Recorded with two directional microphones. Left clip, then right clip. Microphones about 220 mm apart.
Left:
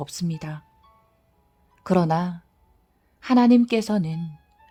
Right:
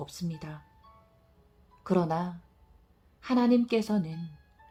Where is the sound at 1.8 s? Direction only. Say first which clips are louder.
Left 7 dB; 50° left (ahead or behind).